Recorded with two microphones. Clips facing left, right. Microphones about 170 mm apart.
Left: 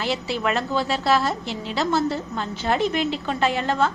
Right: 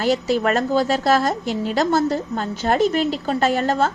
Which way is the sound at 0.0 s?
45° right (ahead or behind).